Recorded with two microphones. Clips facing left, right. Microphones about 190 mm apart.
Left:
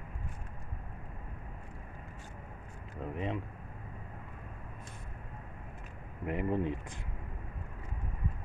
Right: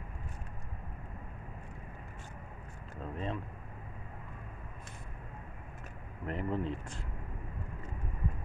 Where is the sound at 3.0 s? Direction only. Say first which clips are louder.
Left 2 dB; 15° left (ahead or behind).